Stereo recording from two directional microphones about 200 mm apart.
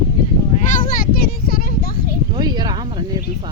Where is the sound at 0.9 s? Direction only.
45° left (ahead or behind).